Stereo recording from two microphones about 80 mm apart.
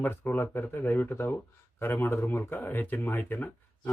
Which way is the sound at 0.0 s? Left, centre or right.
Left.